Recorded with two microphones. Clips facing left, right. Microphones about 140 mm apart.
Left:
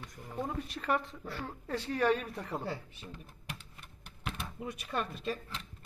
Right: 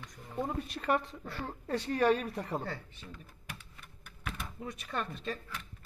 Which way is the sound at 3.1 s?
25° left (ahead or behind).